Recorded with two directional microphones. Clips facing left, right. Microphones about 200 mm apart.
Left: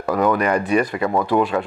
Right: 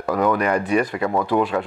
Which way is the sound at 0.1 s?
20° left (ahead or behind).